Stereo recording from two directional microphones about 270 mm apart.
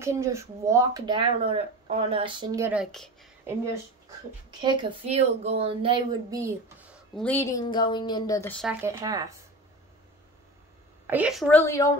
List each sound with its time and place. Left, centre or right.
0.0 s speech: centre
4.5 s speech: centre
7.2 s a woman's voice: centre
8.8 s speech: centre
11.1 s a woman's voice: centre